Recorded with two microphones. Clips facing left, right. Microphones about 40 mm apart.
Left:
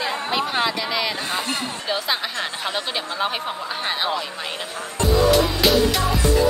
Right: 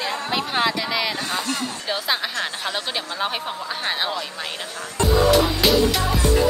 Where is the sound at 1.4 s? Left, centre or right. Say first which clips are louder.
Even; left.